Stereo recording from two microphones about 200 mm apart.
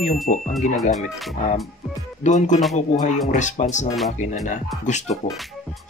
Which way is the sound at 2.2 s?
35° left (ahead or behind).